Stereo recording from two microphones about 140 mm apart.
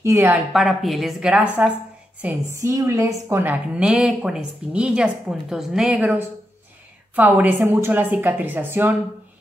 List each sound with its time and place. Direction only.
0.0 s a woman's voice: 20° right (ahead or behind)
0.5 s a woman's voice: centre (ahead or behind)
2.2 s a woman's voice: 20° right (ahead or behind)